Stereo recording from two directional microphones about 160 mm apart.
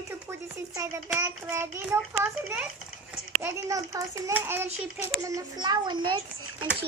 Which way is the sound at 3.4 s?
20° right (ahead or behind).